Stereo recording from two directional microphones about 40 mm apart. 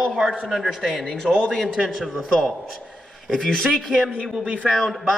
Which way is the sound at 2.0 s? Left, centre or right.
Centre.